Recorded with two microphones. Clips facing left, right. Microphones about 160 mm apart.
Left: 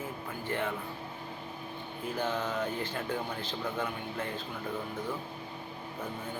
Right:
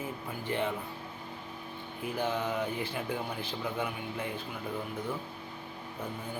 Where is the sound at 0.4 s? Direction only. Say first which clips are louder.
Right 1 dB; 15° right (ahead or behind).